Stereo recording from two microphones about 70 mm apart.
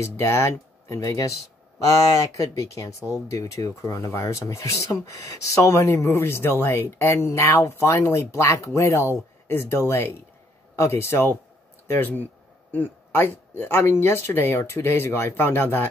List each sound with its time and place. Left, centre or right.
0.0 s speech: left